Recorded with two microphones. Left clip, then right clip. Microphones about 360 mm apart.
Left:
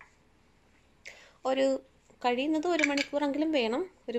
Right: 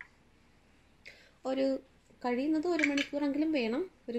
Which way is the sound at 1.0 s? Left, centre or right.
Centre.